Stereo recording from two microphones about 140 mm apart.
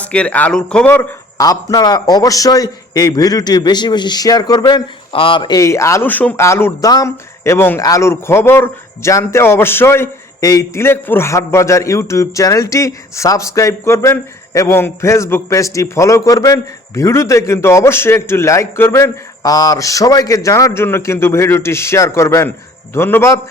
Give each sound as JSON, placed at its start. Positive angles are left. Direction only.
{"t": 0.0, "sound": "speech", "side_deg": 10}
{"t": 1.4, "sound": "a man's voice", "side_deg": 25}
{"t": 5.1, "sound": "a man's voice", "side_deg": 40}